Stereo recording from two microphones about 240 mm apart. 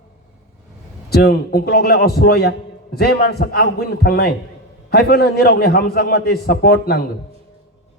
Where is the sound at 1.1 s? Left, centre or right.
Left.